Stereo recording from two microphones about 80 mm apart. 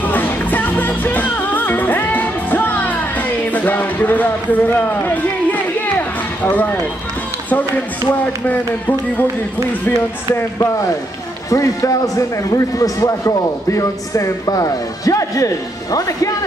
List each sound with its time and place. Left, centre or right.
0.0 s music: left
8.1 s speech: left
11.5 s a man's voice: left